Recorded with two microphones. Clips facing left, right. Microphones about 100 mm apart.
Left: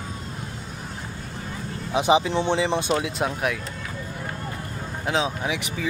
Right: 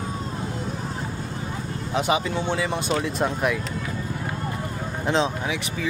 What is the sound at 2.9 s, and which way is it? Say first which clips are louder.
Speech: even; 5° left (ahead or behind).